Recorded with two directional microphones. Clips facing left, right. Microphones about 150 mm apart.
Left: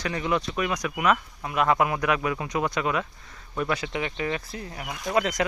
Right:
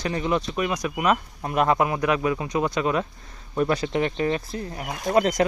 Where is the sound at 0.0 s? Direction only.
30° right (ahead or behind).